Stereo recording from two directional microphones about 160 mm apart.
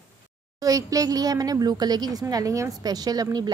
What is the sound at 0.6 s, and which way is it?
A child's voice, 20° right (ahead or behind).